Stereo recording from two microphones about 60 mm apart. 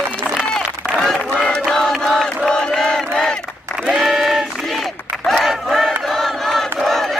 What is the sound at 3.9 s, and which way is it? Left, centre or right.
Crowd, centre.